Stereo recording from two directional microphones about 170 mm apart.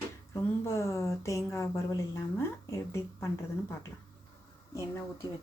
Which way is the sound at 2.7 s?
15° left (ahead or behind).